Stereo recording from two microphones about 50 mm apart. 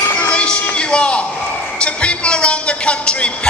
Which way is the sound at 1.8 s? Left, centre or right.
Left.